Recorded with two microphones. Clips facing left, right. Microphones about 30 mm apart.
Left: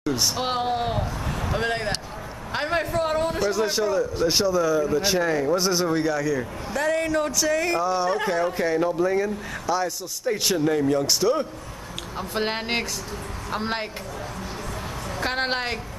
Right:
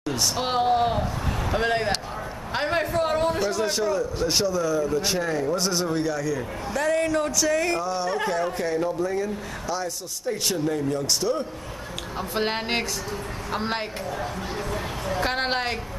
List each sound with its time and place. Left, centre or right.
0.4 s a man's voice: centre; by 11.1 s left
12.2 s a man's voice: centre
14.7 s music: centre
15.2 s a man's voice: centre